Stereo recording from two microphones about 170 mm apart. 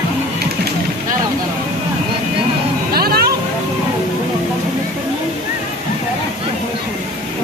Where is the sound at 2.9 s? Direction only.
65° right (ahead or behind).